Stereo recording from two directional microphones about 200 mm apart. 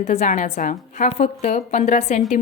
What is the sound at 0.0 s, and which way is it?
A woman's voice, 35° left (ahead or behind).